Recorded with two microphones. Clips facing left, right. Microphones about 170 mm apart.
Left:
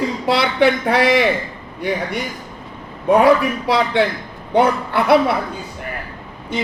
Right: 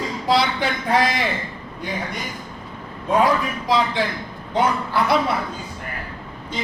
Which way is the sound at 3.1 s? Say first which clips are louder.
Left 6 dB; 70° left (ahead or behind).